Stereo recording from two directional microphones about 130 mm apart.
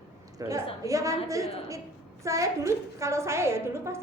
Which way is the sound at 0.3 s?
25° right (ahead or behind).